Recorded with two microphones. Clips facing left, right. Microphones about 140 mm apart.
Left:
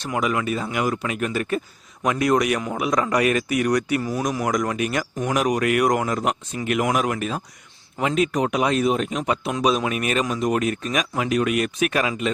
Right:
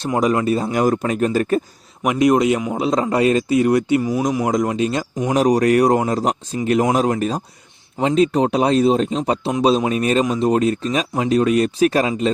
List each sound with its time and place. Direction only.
0.0 s speech: 35° right (ahead or behind)
2.0 s speech: 20° right (ahead or behind)